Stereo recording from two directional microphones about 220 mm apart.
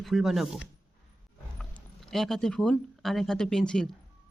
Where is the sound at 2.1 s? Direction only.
Centre (ahead or behind).